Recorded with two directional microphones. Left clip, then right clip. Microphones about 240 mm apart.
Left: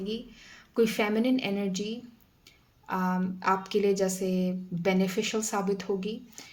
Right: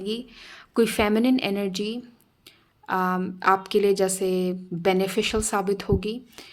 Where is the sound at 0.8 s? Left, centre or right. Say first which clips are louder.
Right 5 dB; right.